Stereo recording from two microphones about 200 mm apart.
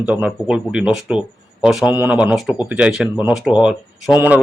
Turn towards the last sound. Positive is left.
turn(degrees=-5)  # may be behind; listen again after turning